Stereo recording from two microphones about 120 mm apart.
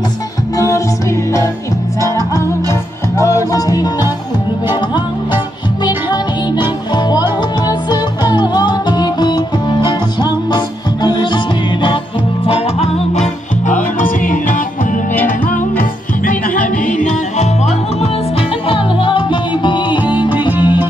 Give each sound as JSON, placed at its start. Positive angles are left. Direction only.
{"t": 0.6, "sound": "music", "side_deg": 25}
{"t": 2.0, "sound": "music", "side_deg": 25}
{"t": 5.9, "sound": "music", "side_deg": 35}
{"t": 12.4, "sound": "music", "side_deg": 55}
{"t": 13.9, "sound": "music", "side_deg": 90}
{"t": 16.8, "sound": "music", "side_deg": 90}
{"t": 18.7, "sound": "music", "side_deg": 45}
{"t": 20.2, "sound": "music", "side_deg": -15}